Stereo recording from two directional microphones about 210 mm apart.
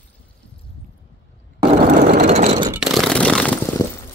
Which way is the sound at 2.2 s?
30° right (ahead or behind).